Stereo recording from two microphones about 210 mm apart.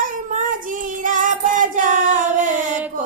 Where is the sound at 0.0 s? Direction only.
40° right (ahead or behind).